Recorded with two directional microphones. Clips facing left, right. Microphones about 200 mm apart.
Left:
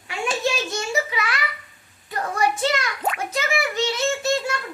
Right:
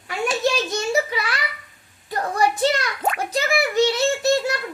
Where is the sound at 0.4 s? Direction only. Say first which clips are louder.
Right 3 dB; 35° right (ahead or behind).